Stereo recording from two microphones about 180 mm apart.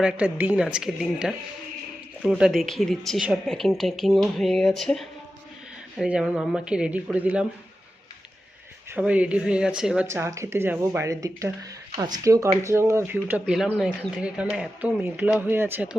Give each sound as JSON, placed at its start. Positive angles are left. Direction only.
{"t": 0.0, "sound": "speech", "side_deg": -5}
{"t": 9.0, "sound": "speech", "side_deg": -5}
{"t": 10.1, "sound": "speech", "side_deg": -15}